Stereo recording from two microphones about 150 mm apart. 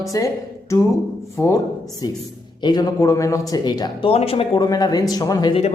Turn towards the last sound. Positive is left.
turn(degrees=25)  # may be behind; listen again after turning